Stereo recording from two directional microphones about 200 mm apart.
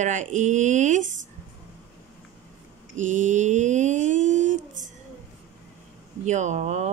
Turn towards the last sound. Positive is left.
turn(degrees=-35)  # may be behind; listen again after turning